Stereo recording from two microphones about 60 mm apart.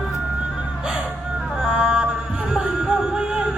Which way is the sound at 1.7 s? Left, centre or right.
Centre.